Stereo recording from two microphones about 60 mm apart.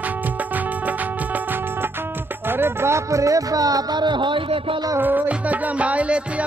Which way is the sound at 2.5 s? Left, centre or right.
Right.